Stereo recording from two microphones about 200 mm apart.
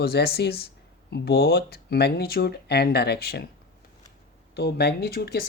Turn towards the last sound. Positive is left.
turn(degrees=50)  # may be behind; listen again after turning